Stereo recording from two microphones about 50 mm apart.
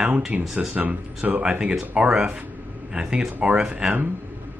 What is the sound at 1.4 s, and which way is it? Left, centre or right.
Speech, centre.